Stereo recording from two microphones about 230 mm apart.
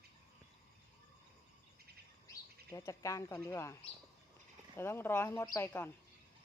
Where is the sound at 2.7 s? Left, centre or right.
Centre.